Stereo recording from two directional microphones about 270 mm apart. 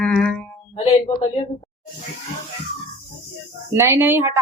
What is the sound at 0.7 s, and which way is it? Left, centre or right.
Speech, left.